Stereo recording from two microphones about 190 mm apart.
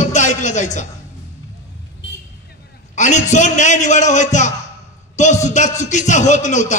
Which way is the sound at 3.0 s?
40° left (ahead or behind).